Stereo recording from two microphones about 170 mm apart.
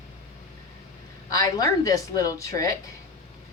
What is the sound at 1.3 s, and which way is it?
Speech, 20° left (ahead or behind).